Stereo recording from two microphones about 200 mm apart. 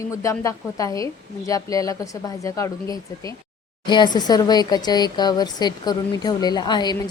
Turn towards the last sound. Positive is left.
turn(degrees=20)  # may be behind; listen again after turning